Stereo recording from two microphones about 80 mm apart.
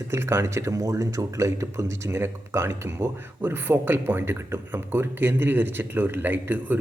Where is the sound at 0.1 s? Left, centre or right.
Right.